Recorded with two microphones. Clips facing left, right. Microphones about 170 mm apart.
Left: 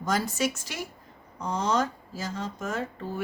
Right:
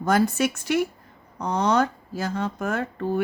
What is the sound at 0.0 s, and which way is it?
Speech, 60° right (ahead or behind).